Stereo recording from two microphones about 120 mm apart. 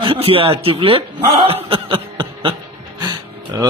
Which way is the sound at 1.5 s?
50° right (ahead or behind).